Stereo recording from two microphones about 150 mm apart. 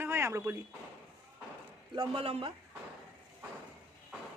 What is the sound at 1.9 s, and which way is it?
Speech, 35° right (ahead or behind).